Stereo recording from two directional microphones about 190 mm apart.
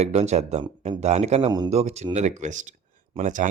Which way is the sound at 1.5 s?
20° right (ahead or behind).